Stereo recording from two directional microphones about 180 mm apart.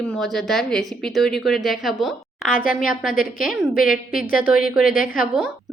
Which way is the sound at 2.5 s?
50° left (ahead or behind).